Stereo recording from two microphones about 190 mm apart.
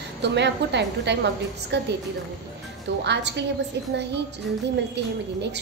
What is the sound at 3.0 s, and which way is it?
Speech, 65° right (ahead or behind).